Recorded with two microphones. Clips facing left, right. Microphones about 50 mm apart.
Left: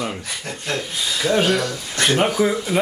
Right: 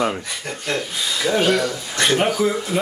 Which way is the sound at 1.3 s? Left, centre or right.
Centre.